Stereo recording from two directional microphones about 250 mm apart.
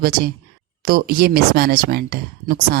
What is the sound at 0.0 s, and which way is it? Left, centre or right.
Speech, right.